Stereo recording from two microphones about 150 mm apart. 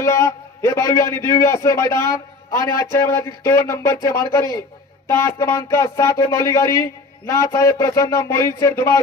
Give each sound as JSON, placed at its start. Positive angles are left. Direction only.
{"t": 0.0, "sound": "a man's voice", "side_deg": 20}